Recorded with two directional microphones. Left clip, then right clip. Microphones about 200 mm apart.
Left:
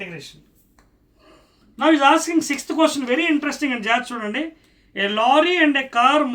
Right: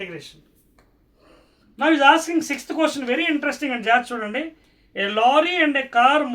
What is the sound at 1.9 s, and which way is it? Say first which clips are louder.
Speech: even; centre (ahead or behind).